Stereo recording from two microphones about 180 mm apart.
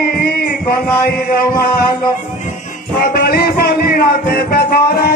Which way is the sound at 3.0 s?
55° left (ahead or behind).